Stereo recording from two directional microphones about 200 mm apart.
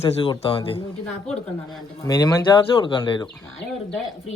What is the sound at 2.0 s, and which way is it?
Speech, 20° left (ahead or behind).